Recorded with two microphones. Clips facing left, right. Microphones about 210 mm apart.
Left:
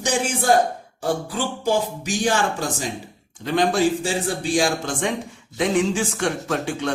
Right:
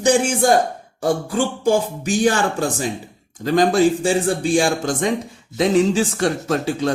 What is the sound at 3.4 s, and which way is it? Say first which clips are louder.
Speech: right 4 dB; 40° right (ahead or behind).